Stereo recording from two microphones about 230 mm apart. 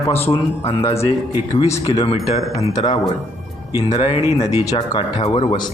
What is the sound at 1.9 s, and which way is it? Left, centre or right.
Speech, left.